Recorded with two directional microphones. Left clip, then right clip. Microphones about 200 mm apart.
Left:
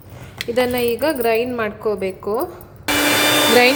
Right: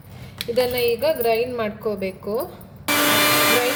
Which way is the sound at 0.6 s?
25° left (ahead or behind).